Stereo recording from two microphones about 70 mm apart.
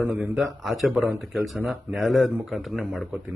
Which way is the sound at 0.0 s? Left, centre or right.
Right.